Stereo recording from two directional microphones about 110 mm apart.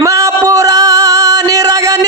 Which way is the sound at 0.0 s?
30° right (ahead or behind).